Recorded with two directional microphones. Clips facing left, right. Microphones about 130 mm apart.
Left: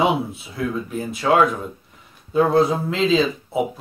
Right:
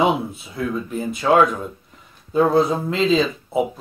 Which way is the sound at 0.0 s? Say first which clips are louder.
Right 1 dB; centre (ahead or behind).